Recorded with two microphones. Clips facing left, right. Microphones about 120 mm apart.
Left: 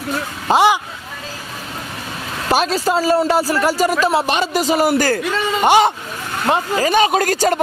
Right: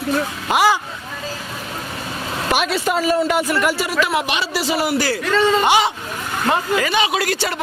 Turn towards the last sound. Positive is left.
turn(degrees=45)  # may be behind; listen again after turning